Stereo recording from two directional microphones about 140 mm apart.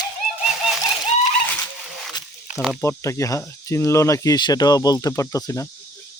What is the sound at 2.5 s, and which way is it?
Snake, 10° right (ahead or behind).